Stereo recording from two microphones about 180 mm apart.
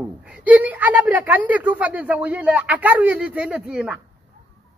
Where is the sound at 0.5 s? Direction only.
10° right (ahead or behind).